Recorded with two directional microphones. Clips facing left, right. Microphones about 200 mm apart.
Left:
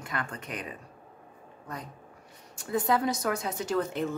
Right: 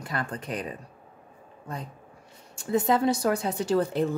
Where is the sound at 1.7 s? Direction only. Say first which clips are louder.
Right 3 dB; 25° right (ahead or behind).